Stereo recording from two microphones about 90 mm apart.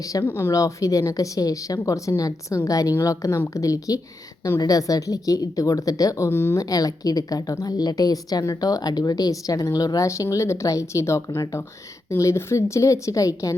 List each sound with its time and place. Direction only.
0.0 s speech: 40° left (ahead or behind)
0.3 s speech: 25° left (ahead or behind)
0.5 s speech: 40° left (ahead or behind)
6.7 s a woman's voice: 40° left (ahead or behind)